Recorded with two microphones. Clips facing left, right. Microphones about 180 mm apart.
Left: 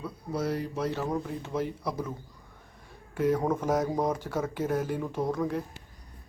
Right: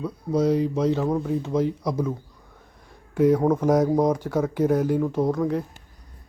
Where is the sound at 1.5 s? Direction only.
15° right (ahead or behind).